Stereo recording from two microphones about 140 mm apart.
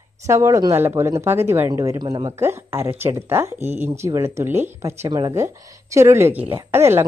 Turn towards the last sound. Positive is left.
turn(degrees=-15)  # may be behind; listen again after turning